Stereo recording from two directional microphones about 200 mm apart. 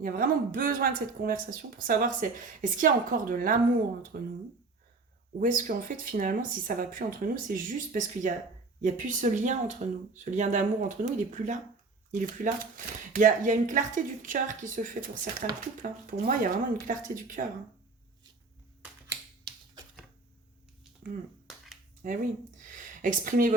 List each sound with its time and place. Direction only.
0.0 s speech: 45° right (ahead or behind)
5.4 s speech: 45° right (ahead or behind)
22.0 s speech: 45° right (ahead or behind)